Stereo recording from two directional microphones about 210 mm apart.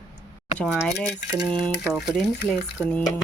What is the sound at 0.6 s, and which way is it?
Speech, 5° left (ahead or behind).